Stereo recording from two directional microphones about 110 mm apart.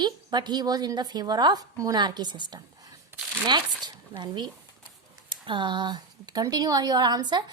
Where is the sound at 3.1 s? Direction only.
20° right (ahead or behind).